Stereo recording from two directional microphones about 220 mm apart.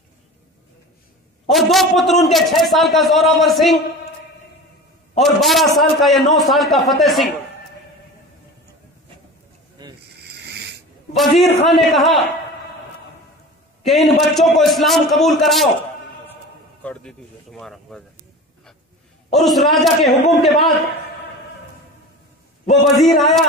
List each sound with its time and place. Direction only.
1.5 s a man's voice: centre (ahead or behind)
5.2 s a man's voice: centre (ahead or behind)
10.0 s snoring: 50° right (ahead or behind)
11.1 s a man's voice: centre (ahead or behind)
13.8 s a man's voice: centre (ahead or behind)
16.8 s a man's voice: 5° left (ahead or behind)
19.3 s a man's voice: centre (ahead or behind)
22.7 s a man's voice: centre (ahead or behind)